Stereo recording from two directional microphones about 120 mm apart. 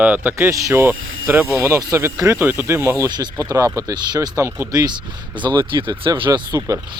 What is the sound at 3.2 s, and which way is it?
Speech, 35° right (ahead or behind).